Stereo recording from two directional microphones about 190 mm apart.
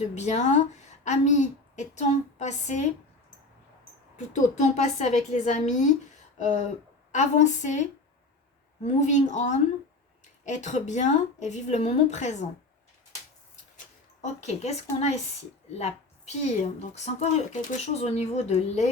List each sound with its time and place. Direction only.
0.0 s a woman's voice: 35° left (ahead or behind)
4.9 s a woman's voice: 35° left (ahead or behind)
6.3 s a sound: 35° left (ahead or behind)
7.1 s a woman's voice: 40° left (ahead or behind)
13.7 s a sound: 40° left (ahead or behind)
14.9 s a woman's voice: 35° left (ahead or behind)